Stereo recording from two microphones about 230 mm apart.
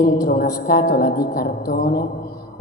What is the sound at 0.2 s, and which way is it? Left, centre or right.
A woman's voice, left.